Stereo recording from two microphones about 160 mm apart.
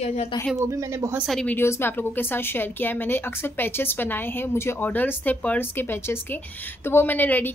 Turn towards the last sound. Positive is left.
turn(degrees=10)  # may be behind; listen again after turning